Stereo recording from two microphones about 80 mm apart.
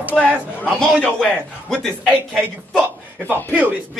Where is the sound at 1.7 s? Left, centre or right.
Centre.